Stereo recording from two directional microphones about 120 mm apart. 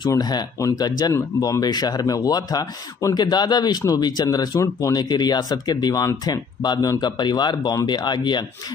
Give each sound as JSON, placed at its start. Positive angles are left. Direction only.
{"t": 0.0, "sound": "speech", "side_deg": 35}